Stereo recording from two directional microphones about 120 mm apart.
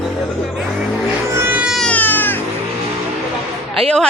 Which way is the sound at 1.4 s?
20° right (ahead or behind).